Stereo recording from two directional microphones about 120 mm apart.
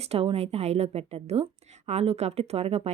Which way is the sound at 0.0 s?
55° right (ahead or behind).